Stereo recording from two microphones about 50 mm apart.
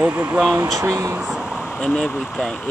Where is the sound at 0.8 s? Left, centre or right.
Right.